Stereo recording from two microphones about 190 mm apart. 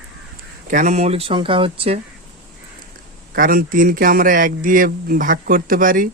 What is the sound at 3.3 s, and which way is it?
Speech, 50° right (ahead or behind).